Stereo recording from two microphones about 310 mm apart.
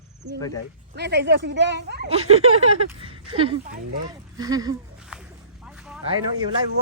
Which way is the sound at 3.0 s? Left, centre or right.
Centre.